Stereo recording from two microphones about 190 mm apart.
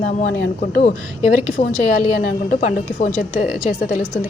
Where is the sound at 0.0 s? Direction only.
40° left (ahead or behind).